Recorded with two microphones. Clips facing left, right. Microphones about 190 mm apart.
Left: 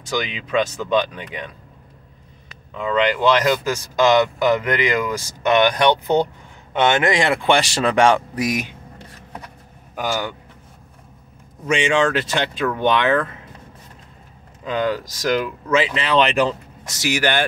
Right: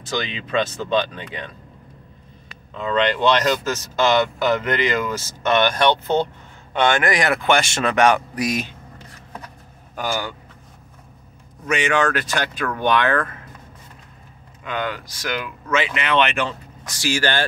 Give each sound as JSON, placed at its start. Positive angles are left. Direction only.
{"t": 0.0, "sound": "speech", "side_deg": 15}
{"t": 2.7, "sound": "speech", "side_deg": 10}
{"t": 9.9, "sound": "speech", "side_deg": 20}
{"t": 11.7, "sound": "speech", "side_deg": 25}
{"t": 14.6, "sound": "speech", "side_deg": 35}